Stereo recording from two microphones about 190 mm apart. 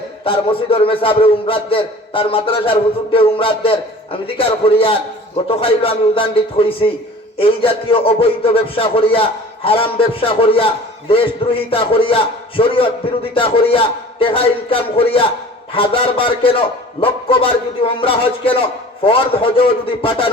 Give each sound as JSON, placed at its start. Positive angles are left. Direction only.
{"t": 0.3, "sound": "a man's voice", "side_deg": 30}
{"t": 11.7, "sound": "a man's voice", "side_deg": 30}